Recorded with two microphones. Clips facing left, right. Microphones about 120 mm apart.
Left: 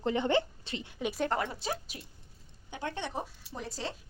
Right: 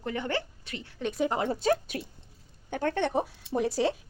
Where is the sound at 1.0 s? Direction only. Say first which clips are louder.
Right 4 dB; 5° left (ahead or behind).